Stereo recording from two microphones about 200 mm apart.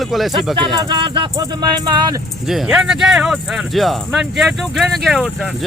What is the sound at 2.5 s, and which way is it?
Speech, centre (ahead or behind).